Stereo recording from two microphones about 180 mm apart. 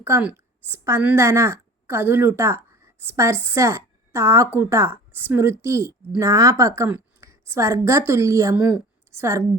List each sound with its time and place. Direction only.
0.0 s a woman's voice: 10° right (ahead or behind)